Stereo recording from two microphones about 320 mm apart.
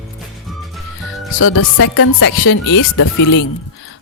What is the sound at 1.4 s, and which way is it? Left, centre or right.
Speech, left.